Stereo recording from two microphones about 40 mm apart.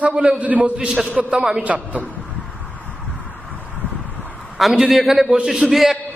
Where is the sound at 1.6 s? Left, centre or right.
Right.